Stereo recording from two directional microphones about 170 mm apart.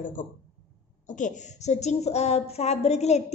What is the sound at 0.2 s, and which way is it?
A woman's voice, 50° left (ahead or behind).